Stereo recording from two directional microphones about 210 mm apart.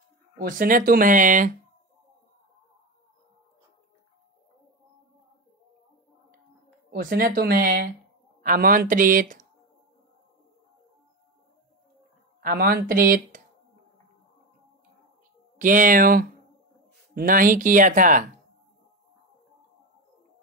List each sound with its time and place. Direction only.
0.4 s speech: 45° right (ahead or behind)
6.9 s speech: 45° right (ahead or behind)
12.4 s speech: 45° right (ahead or behind)
15.6 s speech: 40° right (ahead or behind)